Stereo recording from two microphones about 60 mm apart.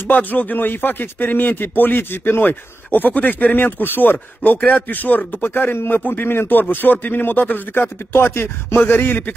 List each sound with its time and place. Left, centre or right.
0.1 s speech: left
7.7 s speech: left